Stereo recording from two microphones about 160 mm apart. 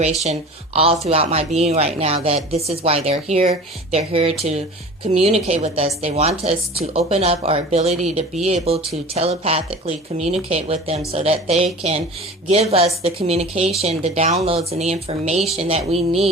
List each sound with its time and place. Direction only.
0.3 s a woman's voice: 40° right (ahead or behind)